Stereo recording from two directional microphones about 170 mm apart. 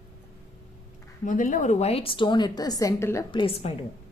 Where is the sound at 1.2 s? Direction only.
50° left (ahead or behind); by 3.3 s 20° left (ahead or behind).